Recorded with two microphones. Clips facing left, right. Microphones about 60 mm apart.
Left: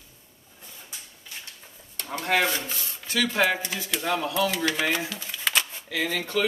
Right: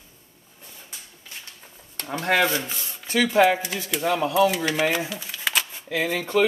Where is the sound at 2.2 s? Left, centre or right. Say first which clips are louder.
Right 3 dB; right.